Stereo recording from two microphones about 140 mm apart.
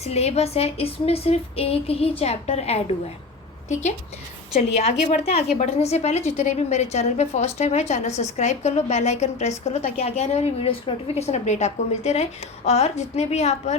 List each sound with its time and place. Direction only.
0.0 s a woman's voice: 50° left (ahead or behind)